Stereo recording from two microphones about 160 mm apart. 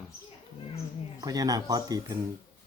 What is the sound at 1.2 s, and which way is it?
Speech, 25° right (ahead or behind).